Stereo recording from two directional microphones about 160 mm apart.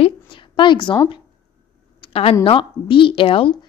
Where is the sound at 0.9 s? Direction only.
30° left (ahead or behind).